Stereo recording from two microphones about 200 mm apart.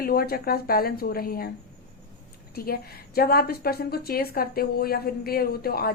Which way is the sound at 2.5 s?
50° left (ahead or behind).